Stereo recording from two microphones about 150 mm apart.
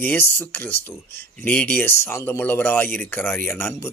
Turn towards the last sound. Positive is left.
turn(degrees=15)  # may be behind; listen again after turning